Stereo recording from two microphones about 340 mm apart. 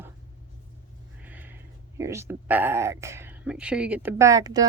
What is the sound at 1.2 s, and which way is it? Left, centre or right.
Speech, centre.